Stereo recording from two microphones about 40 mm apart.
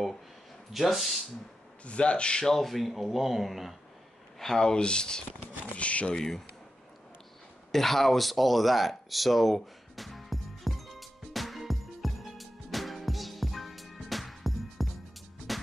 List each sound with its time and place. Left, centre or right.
0.7 s speech: centre
1.9 s speech: left
2.4 s speech: centre
4.4 s speech: centre
5.8 s speech: left
6.1 s speech: centre
7.7 s a sound: centre
15.5 s music: centre